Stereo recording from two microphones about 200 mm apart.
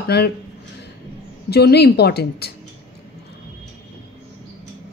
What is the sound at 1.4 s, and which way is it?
Speech, 55° left (ahead or behind).